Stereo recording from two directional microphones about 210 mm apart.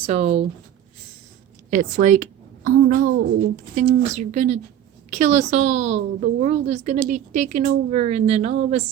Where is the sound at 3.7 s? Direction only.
35° right (ahead or behind).